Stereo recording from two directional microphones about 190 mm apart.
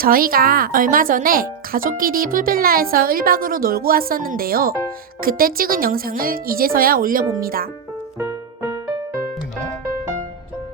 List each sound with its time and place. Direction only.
0.0 s speech: 50° right (ahead or behind)
8.2 s music: 10° right (ahead or behind)